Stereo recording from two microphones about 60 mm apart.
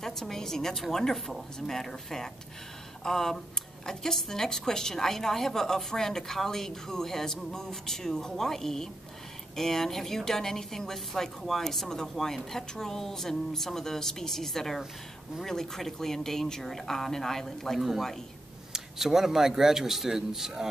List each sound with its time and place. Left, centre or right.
0.0 s a woman's voice: centre